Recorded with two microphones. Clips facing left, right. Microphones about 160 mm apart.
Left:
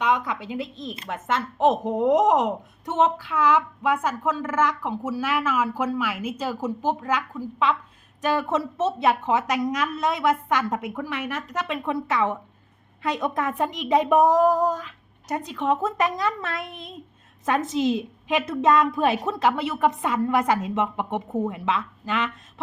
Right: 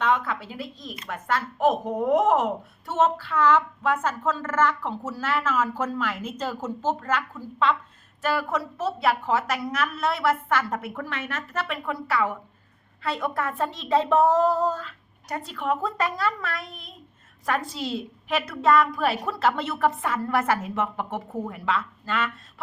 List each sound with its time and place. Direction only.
0.0 s a woman's voice: 15° left (ahead or behind)